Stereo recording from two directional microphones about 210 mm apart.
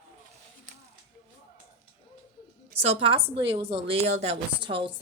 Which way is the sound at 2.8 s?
25° right (ahead or behind).